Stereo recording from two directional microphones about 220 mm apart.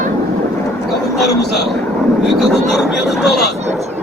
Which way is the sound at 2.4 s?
Centre (ahead or behind).